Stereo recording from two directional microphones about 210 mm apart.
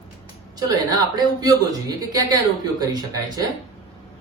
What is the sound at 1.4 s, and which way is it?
Speech, 20° right (ahead or behind).